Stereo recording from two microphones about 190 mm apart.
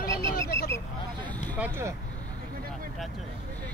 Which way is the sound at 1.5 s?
10° right (ahead or behind).